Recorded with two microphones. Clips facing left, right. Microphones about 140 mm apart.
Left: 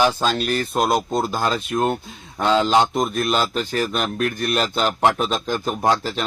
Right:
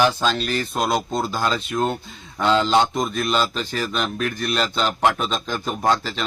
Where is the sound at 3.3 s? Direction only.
50° left (ahead or behind).